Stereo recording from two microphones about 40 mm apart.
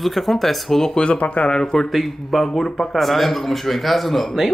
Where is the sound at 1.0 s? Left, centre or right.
Left.